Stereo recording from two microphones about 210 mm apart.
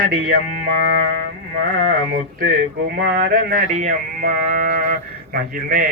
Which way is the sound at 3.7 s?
35° right (ahead or behind).